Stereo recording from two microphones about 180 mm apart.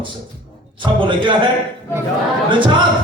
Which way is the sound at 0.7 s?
25° right (ahead or behind).